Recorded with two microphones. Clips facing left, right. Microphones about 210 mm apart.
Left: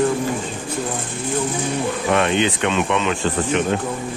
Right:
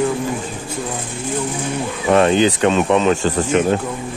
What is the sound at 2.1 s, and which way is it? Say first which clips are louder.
Speech: right 6 dB; 35° right (ahead or behind).